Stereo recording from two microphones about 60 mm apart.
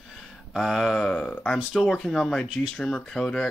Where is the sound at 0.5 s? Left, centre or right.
Centre.